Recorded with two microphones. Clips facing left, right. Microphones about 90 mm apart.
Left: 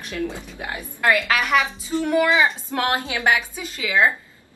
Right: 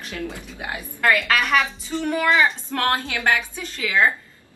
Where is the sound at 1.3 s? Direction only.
5° left (ahead or behind).